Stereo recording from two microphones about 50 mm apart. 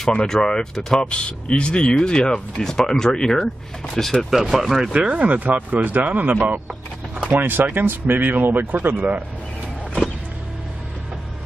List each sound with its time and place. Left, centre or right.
0.3 s speech: centre
4.9 s speech: right